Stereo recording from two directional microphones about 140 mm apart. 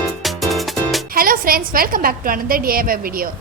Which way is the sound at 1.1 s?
90° right.